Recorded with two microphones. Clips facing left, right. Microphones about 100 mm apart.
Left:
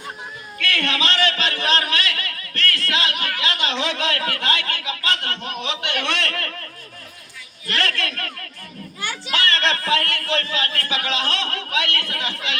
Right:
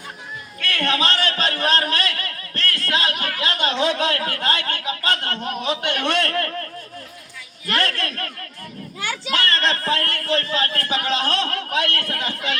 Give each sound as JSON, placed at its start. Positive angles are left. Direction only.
{"t": 0.7, "sound": "a man's voice", "side_deg": -40}
{"t": 7.7, "sound": "a man's voice", "side_deg": -45}
{"t": 9.3, "sound": "a man's voice", "side_deg": -40}